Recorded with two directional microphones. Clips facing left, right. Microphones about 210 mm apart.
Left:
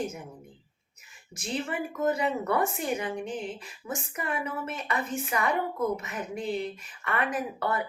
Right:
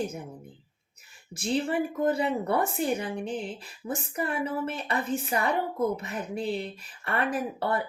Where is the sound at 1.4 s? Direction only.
30° right (ahead or behind).